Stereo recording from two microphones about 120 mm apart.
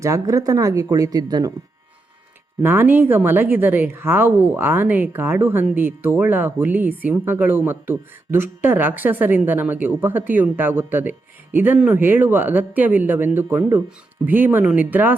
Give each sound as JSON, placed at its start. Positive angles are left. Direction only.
{"t": 0.0, "sound": "speech", "side_deg": -25}
{"t": 2.6, "sound": "speech", "side_deg": -15}